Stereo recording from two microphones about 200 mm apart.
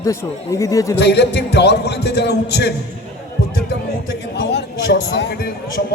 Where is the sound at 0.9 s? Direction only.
55° left (ahead or behind).